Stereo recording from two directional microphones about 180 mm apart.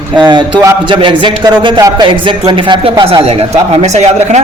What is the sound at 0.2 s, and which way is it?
A man's voice, 25° right (ahead or behind).